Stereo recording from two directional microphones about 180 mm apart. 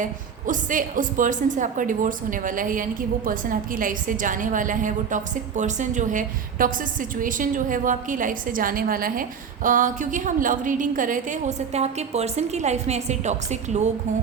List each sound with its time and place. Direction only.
0.0 s a woman's voice: 45° right (ahead or behind)